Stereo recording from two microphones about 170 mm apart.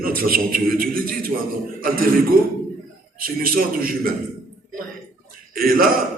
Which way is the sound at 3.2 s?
60° right (ahead or behind).